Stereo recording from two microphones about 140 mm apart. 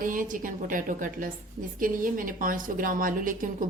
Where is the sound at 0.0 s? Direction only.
75° right (ahead or behind).